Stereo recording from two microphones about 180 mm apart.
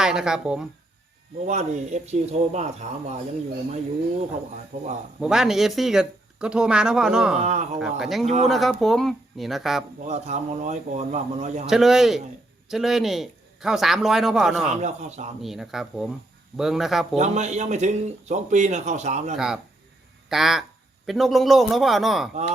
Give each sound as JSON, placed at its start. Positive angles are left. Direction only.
{"t": 0.0, "sound": "speech", "side_deg": -5}
{"t": 1.5, "sound": "speech", "side_deg": -40}
{"t": 4.7, "sound": "speech", "side_deg": -40}
{"t": 5.2, "sound": "speech", "side_deg": -5}
{"t": 7.3, "sound": "speech", "side_deg": -40}
{"t": 7.8, "sound": "speech", "side_deg": 0}
{"t": 8.2, "sound": "speech", "side_deg": -35}
{"t": 8.4, "sound": "speech", "side_deg": 0}
{"t": 10.0, "sound": "speech", "side_deg": -40}
{"t": 11.6, "sound": "speech", "side_deg": 0}
{"t": 14.8, "sound": "speech", "side_deg": -40}
{"t": 15.4, "sound": "speech", "side_deg": 0}
{"t": 17.2, "sound": "speech", "side_deg": -40}
{"t": 20.3, "sound": "speech", "side_deg": 0}